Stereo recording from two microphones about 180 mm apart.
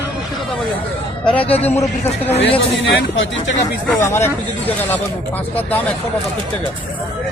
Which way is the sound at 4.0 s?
15° left (ahead or behind).